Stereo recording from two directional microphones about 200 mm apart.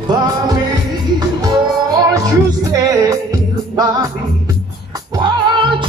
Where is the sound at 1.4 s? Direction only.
20° right (ahead or behind).